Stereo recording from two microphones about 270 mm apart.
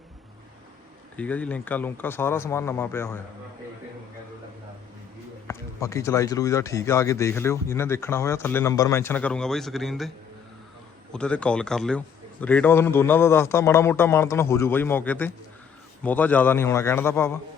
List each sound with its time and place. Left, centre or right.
1.1 s speech: centre
5.5 s speech: centre
11.1 s speech: centre